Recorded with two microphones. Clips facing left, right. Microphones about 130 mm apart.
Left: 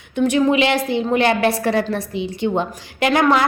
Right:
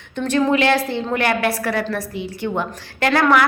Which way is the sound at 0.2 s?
10° left (ahead or behind).